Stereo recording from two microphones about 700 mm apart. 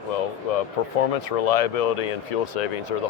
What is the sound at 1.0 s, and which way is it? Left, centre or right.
Speech, left.